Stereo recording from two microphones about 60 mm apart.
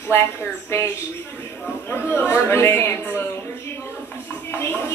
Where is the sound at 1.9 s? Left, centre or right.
Left.